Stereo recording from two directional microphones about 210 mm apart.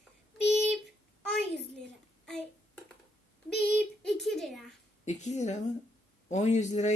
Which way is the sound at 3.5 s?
50° left (ahead or behind).